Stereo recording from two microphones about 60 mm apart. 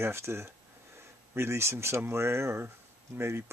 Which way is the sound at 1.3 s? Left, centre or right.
Right.